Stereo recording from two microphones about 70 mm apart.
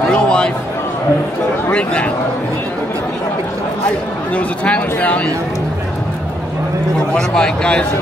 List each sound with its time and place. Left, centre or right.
0.1 s a sound: centre
1.7 s speech: centre
4.4 s speech: centre
7.2 s speech: centre